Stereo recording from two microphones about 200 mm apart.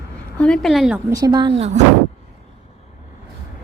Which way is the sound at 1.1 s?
20° right (ahead or behind).